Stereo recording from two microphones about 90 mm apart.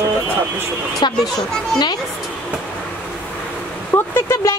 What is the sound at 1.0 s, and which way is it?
Speech, 55° left (ahead or behind).